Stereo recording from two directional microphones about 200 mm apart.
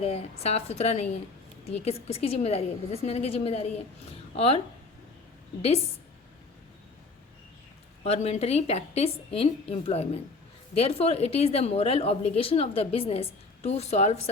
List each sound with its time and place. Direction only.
0.0 s a woman's voice: 30° left (ahead or behind)
8.0 s a woman's voice: 30° left (ahead or behind)